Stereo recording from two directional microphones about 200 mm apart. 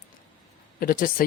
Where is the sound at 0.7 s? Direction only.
45° left (ahead or behind).